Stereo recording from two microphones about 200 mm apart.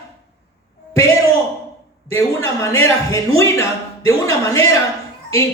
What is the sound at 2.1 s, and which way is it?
A woman's voice, 15° left (ahead or behind).